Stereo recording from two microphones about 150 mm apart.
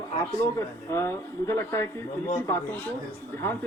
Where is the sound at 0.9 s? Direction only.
15° left (ahead or behind).